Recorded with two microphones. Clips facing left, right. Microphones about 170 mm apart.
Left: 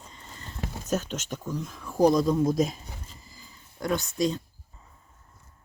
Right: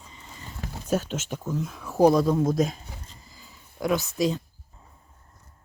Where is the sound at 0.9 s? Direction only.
10° right (ahead or behind).